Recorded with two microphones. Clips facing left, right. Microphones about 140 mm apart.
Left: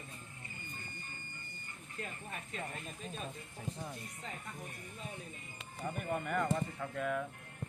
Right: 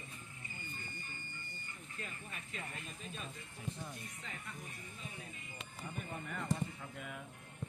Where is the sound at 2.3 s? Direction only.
40° left (ahead or behind).